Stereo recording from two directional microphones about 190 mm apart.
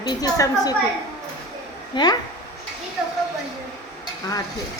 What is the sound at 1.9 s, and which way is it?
Speech, 20° left (ahead or behind).